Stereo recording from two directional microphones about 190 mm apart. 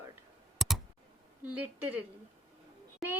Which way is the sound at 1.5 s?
10° right (ahead or behind).